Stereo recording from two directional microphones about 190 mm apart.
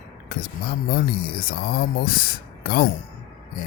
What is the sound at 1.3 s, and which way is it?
Speech, 50° left (ahead or behind).